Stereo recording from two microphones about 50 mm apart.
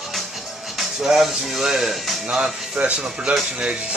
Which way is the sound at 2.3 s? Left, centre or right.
Centre.